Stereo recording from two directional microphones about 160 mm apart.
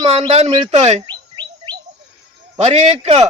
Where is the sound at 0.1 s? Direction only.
40° right (ahead or behind).